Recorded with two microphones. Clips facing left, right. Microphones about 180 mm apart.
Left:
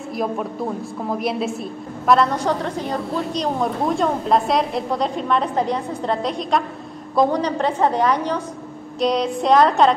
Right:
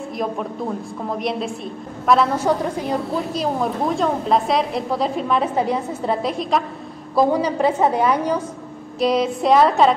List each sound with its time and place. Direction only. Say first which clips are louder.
0.1 s a woman's voice: left 2 dB; centre (ahead or behind)